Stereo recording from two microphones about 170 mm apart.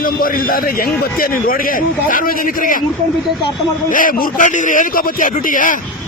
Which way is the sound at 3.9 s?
55° left (ahead or behind).